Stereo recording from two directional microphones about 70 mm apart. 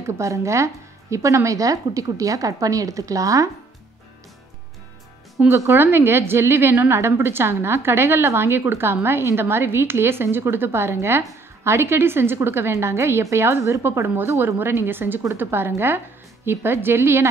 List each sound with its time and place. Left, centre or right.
0.0 s a woman's voice: right
5.5 s a woman's voice: right